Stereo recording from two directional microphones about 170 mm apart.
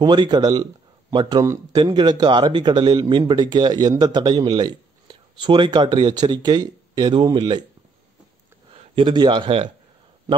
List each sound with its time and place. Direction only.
0.0 s speech: 25° right (ahead or behind)
8.7 s speech: 30° right (ahead or behind)